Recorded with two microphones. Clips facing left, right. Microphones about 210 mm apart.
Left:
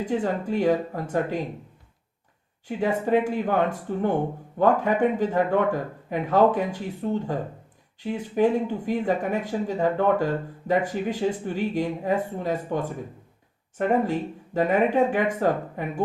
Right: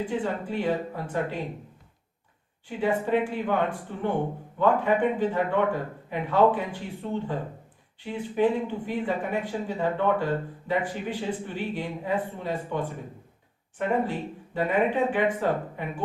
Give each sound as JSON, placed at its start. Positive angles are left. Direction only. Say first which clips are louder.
{"t": 0.0, "sound": "speech", "louder": "left 3 dB", "side_deg": 45}
{"t": 2.6, "sound": "speech", "louder": "left 2 dB", "side_deg": 45}